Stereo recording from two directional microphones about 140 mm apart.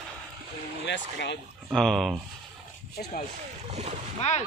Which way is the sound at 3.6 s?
50° right (ahead or behind).